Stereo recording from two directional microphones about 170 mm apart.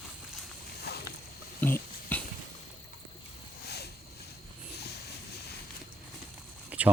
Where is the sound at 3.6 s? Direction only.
70° left (ahead or behind).